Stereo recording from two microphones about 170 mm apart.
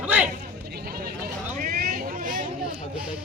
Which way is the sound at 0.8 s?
60° right (ahead or behind).